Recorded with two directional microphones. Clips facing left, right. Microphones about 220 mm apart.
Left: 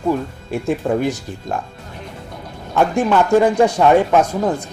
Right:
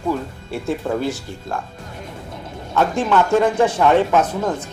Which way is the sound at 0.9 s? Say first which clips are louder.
Left 4 dB; 20° left (ahead or behind).